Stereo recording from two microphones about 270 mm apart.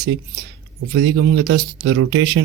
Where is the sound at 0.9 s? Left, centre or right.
Right.